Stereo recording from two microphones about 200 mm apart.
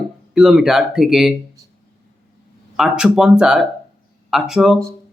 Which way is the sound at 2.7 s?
5° right (ahead or behind).